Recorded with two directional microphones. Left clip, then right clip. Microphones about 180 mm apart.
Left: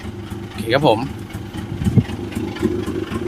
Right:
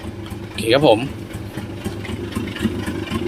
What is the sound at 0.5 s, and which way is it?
Speech, centre (ahead or behind).